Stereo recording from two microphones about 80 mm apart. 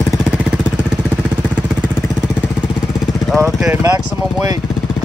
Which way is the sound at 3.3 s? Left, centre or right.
Right.